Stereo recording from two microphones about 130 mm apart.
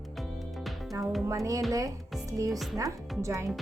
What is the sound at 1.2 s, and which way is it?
Speech, 25° right (ahead or behind).